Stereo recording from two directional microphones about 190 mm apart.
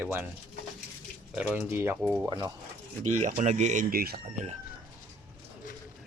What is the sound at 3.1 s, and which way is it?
Speech, 40° right (ahead or behind).